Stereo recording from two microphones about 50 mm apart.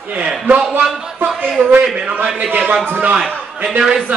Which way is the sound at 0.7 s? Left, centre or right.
Right.